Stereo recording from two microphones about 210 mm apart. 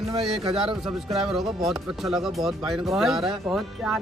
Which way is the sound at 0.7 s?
Centre (ahead or behind).